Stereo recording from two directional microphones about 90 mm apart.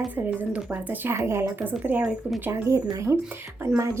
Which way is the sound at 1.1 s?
30° right (ahead or behind).